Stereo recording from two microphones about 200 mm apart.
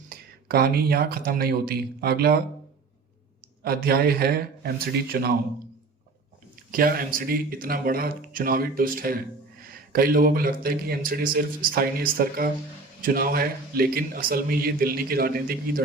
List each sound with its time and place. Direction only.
0.1 s a man's voice: 50° right (ahead or behind)
3.6 s a man's voice: 50° right (ahead or behind)
6.7 s a man's voice: 45° right (ahead or behind)